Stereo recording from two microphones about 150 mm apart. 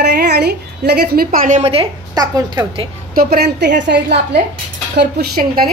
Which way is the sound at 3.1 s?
85° right.